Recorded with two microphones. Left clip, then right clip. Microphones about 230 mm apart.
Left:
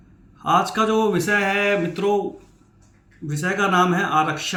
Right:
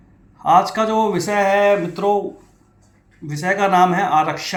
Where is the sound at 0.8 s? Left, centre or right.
Left.